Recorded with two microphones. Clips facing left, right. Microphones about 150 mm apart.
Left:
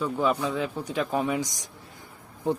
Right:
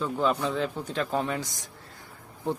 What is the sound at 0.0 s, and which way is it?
Speech, 5° left (ahead or behind).